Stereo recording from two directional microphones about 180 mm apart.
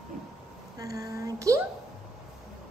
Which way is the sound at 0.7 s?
20° right (ahead or behind).